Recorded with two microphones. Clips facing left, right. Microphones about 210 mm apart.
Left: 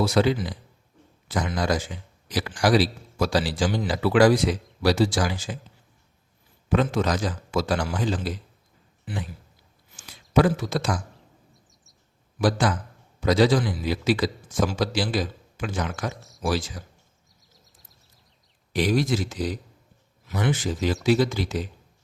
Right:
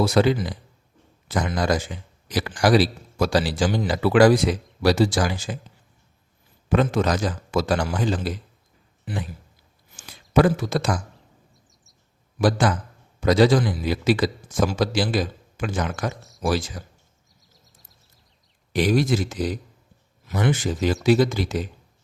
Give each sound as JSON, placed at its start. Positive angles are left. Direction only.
{"t": 0.0, "sound": "speech", "side_deg": -50}
{"t": 6.7, "sound": "speech", "side_deg": -55}
{"t": 10.3, "sound": "speech", "side_deg": -50}
{"t": 12.4, "sound": "speech", "side_deg": -50}
{"t": 16.1, "sound": "speech", "side_deg": 0}
{"t": 16.4, "sound": "speech", "side_deg": -50}
{"t": 17.5, "sound": "a sound", "side_deg": 0}
{"t": 18.7, "sound": "speech", "side_deg": -50}
{"t": 21.2, "sound": "speech", "side_deg": -45}